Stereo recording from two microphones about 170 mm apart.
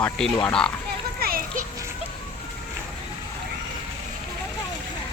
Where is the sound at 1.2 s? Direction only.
60° right (ahead or behind).